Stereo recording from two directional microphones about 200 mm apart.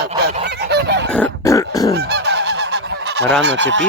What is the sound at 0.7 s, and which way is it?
Goose, 55° right (ahead or behind).